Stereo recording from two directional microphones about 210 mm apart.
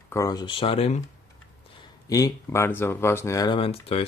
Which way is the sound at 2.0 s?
15° left (ahead or behind).